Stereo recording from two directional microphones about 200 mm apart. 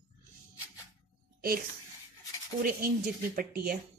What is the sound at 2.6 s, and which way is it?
Speech, 45° right (ahead or behind).